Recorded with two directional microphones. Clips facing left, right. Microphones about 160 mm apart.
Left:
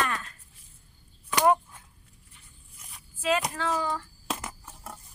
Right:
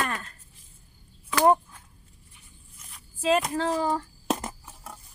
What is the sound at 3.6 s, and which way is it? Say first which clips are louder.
Speech: right 4 dB; 40° right (ahead or behind).